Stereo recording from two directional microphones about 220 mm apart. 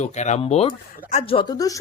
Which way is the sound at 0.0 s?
30° left (ahead or behind).